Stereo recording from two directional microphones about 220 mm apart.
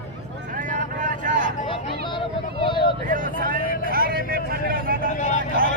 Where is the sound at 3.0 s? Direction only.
40° right (ahead or behind).